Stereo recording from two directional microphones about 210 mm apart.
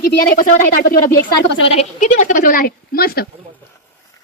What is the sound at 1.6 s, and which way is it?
A woman's voice, 35° left (ahead or behind).